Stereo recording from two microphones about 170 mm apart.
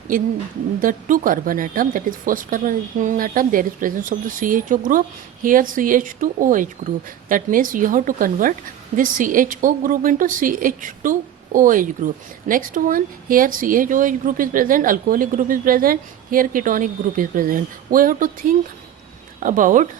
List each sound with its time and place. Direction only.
0.8 s a woman's voice: 50° right (ahead or behind)